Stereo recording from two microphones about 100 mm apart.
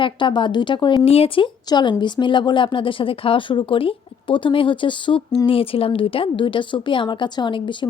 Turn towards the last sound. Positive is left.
turn(degrees=55)  # may be behind; listen again after turning